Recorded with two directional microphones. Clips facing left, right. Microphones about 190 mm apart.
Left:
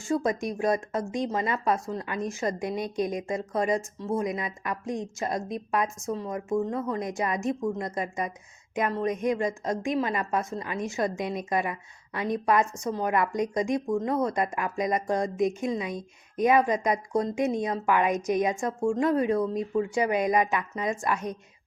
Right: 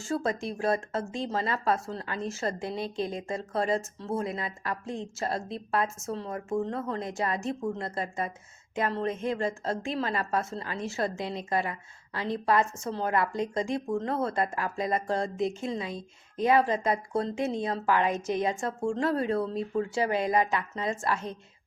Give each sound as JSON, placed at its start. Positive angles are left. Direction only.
{"t": 0.0, "sound": "speech", "side_deg": 15}